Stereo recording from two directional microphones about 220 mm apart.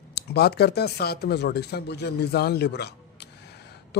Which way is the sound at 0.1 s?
50° left (ahead or behind).